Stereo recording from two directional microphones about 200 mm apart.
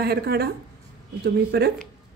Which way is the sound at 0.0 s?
50° right (ahead or behind).